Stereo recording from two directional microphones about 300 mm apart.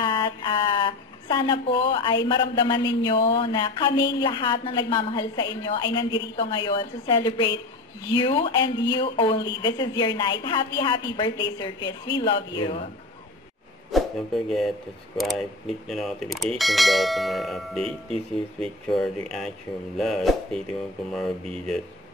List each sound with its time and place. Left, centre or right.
0.0 s a sound: centre
2.2 s speech: centre
13.9 s speech: centre